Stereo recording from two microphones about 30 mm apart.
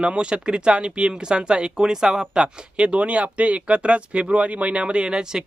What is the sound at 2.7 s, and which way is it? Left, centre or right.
Speech, right.